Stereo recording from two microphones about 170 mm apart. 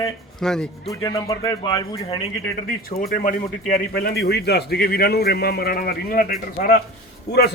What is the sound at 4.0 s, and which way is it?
A man's voice, 70° left (ahead or behind).